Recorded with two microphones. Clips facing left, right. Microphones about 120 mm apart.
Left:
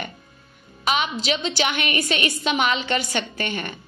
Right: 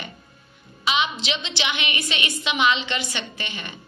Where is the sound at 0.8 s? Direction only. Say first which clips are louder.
Left 2 dB; 45° left (ahead or behind).